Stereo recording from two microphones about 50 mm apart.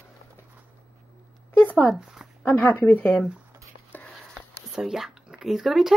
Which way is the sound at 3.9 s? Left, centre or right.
Left.